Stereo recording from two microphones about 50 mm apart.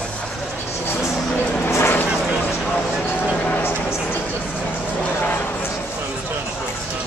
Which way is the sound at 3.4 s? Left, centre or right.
Left.